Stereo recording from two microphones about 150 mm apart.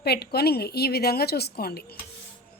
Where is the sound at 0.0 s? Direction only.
90° left.